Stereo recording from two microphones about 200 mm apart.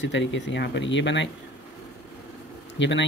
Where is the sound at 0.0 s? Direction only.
65° left (ahead or behind).